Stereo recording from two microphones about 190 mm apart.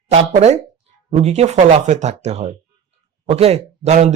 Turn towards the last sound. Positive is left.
turn(degrees=-35)  # may be behind; listen again after turning